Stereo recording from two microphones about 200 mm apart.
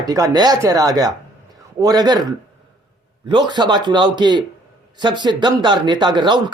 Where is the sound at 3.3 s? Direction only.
20° right (ahead or behind).